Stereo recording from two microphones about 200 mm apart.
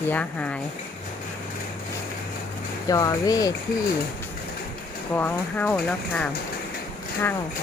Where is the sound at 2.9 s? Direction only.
20° left (ahead or behind).